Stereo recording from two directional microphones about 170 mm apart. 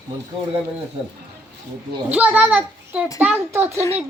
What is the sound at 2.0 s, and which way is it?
A child's voice, 10° right (ahead or behind).